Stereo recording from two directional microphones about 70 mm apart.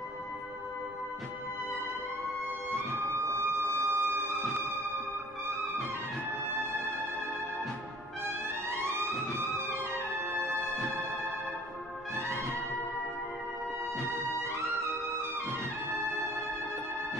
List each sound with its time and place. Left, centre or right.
3.1 s music: right
8.9 s music: right